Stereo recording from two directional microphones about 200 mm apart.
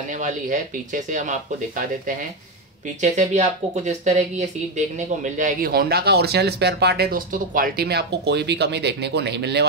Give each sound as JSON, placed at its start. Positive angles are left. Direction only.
{"t": 0.1, "sound": "speech", "side_deg": -40}
{"t": 3.0, "sound": "speech", "side_deg": -35}